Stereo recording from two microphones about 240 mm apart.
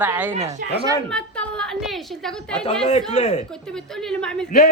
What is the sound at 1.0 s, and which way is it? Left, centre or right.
A woman's voice, centre.